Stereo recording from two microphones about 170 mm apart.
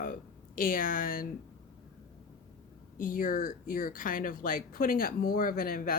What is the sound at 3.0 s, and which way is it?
Speech, 55° left (ahead or behind).